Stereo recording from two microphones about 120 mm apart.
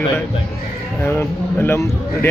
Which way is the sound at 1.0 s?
20° left (ahead or behind).